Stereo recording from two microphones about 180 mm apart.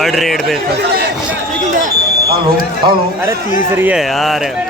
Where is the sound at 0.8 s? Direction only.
65° right (ahead or behind).